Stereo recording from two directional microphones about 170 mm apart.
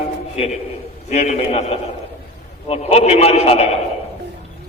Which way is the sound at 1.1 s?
40° left (ahead or behind).